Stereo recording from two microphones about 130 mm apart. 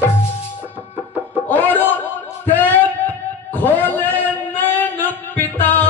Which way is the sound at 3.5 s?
15° left (ahead or behind).